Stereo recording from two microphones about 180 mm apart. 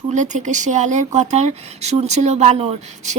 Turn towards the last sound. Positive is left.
turn(degrees=-35)  # may be behind; listen again after turning